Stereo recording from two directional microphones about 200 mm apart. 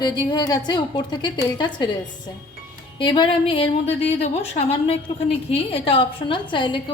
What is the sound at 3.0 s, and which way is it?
A woman's voice, 25° left (ahead or behind).